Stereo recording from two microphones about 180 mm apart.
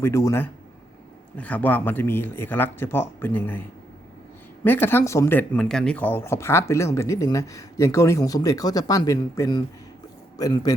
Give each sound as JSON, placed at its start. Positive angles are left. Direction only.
{"t": 0.0, "sound": "speech", "side_deg": 15}
{"t": 4.6, "sound": "a man's voice", "side_deg": 10}